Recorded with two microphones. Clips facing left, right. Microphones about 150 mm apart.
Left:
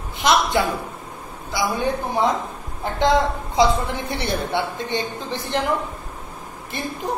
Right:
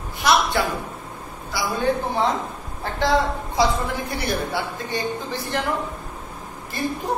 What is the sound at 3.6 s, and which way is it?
A woman's voice, 25° left (ahead or behind).